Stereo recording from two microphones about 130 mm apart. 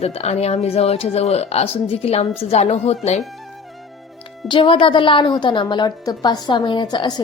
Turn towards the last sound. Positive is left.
turn(degrees=35)  # may be behind; listen again after turning